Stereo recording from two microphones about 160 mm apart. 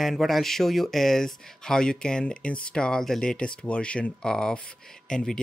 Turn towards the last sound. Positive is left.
turn(degrees=5)  # may be behind; listen again after turning